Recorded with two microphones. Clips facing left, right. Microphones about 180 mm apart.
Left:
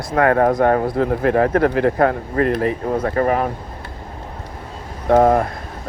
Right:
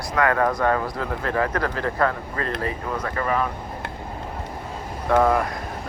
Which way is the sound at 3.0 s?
35° left (ahead or behind).